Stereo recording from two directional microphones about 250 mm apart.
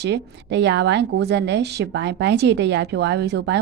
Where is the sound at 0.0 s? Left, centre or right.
Right.